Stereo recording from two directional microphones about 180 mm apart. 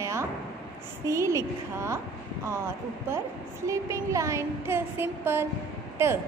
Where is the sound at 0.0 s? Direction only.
15° right (ahead or behind).